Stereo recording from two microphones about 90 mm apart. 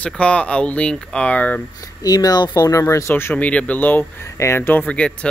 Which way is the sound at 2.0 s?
45° left (ahead or behind).